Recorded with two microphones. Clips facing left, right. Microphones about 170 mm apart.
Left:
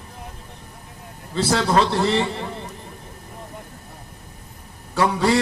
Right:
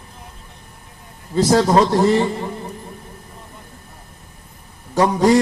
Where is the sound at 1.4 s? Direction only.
40° right (ahead or behind).